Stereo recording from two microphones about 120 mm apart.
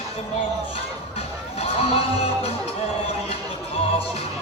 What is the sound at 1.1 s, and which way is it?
Music, 55° left (ahead or behind).